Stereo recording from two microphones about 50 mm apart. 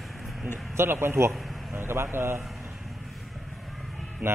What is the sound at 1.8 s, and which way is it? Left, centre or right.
Speech, right.